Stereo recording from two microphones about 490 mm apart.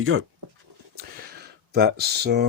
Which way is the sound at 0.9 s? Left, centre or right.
Centre.